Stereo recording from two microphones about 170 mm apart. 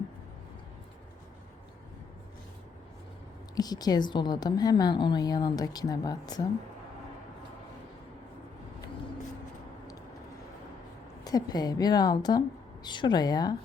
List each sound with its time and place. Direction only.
3.5 s a woman's voice: 20° left (ahead or behind)
11.2 s a woman's voice: 20° left (ahead or behind)